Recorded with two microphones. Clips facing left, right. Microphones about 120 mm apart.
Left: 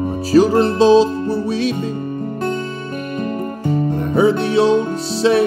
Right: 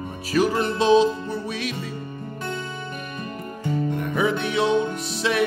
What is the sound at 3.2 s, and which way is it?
Music, 50° left (ahead or behind).